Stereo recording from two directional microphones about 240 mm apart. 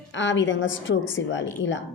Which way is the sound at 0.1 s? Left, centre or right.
Left.